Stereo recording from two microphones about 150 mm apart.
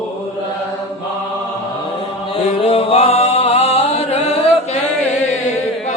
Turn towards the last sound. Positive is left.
turn(degrees=45)  # may be behind; listen again after turning